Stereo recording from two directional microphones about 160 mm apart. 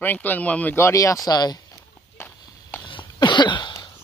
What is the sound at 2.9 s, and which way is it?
Cough, 30° left (ahead or behind).